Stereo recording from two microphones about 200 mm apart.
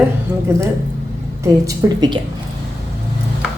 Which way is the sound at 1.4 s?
20° right (ahead or behind).